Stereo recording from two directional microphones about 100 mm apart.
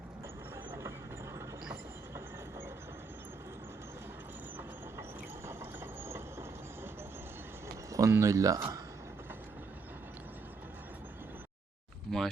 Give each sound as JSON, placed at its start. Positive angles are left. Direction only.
{"t": 0.7, "sound": "vehicle", "side_deg": -25}
{"t": 5.5, "sound": "train", "side_deg": -25}
{"t": 7.9, "sound": "speech", "side_deg": -30}
{"t": 12.1, "sound": "a sound", "side_deg": 0}